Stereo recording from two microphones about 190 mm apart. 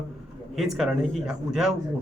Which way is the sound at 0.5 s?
Centre (ahead or behind).